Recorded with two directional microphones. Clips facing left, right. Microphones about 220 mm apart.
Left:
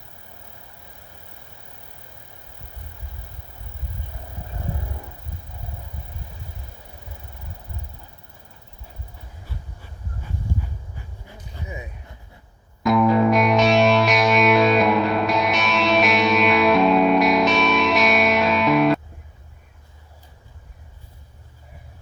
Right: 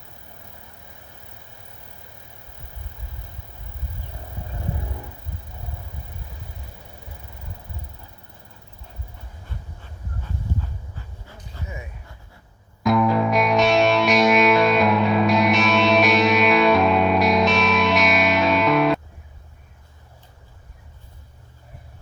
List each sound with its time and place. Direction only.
10.9 s dog: 15° left (ahead or behind)
12.8 s music: centre (ahead or behind)